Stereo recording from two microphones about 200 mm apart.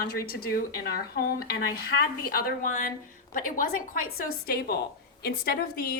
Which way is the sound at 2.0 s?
45° left (ahead or behind).